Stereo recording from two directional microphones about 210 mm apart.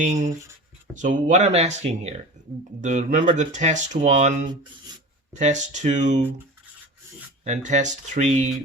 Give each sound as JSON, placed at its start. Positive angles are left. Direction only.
{"t": 0.0, "sound": "speech", "side_deg": -35}
{"t": 7.4, "sound": "speech", "side_deg": -35}